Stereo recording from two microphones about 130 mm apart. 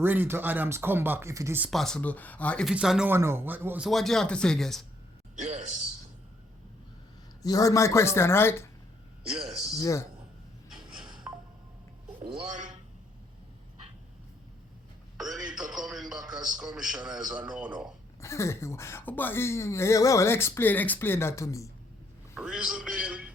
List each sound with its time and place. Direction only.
0.0 s speech: 15° right (ahead or behind)
1.7 s speech: 5° left (ahead or behind)
2.6 s speech: 5° right (ahead or behind)
3.1 s speech: 20° right (ahead or behind)
3.8 s speech: centre (ahead or behind)
5.4 s a man's voice: 70° right (ahead or behind)
7.4 s speech: 25° left (ahead or behind)
9.8 s speech: 25° left (ahead or behind)
11.3 s music: 15° right (ahead or behind)
15.2 s a sound: centre (ahead or behind)
18.2 s speech: 20° left (ahead or behind)
22.4 s a man's voice: 5° right (ahead or behind)